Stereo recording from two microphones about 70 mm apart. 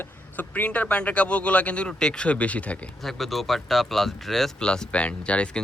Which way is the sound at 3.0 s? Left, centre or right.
Centre.